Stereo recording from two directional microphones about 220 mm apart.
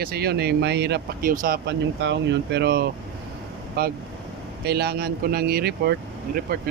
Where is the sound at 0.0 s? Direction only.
45° right (ahead or behind).